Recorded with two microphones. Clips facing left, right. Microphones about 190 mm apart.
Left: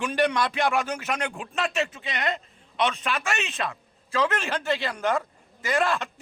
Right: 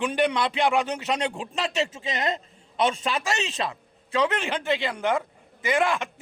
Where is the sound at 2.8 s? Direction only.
25° right (ahead or behind).